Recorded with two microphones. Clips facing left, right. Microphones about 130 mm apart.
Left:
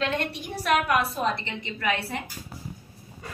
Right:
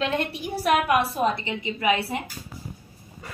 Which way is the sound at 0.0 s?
5° right (ahead or behind).